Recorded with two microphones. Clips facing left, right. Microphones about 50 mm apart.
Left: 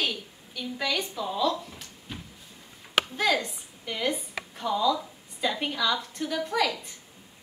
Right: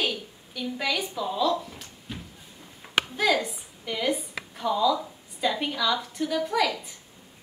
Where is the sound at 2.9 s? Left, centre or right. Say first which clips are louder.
Right 1 dB; centre.